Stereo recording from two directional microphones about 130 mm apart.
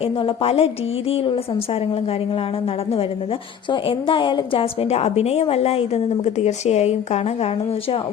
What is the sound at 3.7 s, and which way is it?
A woman's voice, 40° left (ahead or behind).